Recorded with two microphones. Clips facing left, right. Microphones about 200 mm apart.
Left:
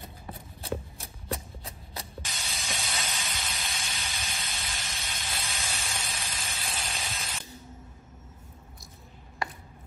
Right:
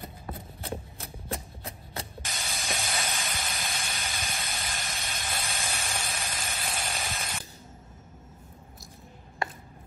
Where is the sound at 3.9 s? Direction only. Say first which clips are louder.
Right 3 dB; 50° right (ahead or behind).